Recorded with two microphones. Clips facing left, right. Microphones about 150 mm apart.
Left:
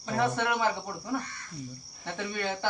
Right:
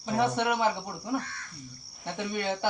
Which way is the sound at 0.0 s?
15° right (ahead or behind).